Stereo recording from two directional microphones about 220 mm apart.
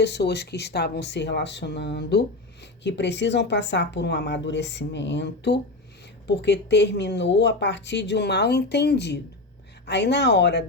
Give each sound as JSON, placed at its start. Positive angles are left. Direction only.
{"t": 0.0, "sound": "speech", "side_deg": 50}